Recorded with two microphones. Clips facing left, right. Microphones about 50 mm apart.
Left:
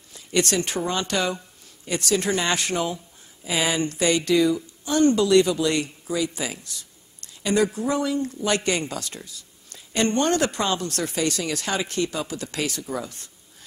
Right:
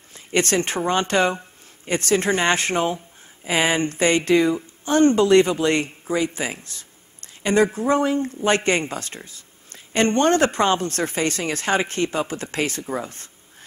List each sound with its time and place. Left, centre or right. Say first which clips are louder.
0.1 s a woman's voice: right 2 dB; right